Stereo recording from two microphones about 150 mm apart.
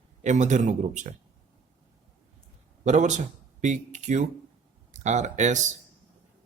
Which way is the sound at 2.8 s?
55° right (ahead or behind).